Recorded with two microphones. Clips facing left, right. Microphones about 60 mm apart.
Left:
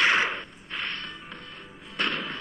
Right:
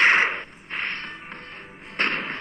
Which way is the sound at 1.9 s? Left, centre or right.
Right.